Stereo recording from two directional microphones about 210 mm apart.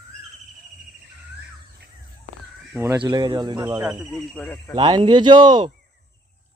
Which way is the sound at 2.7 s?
15° right (ahead or behind).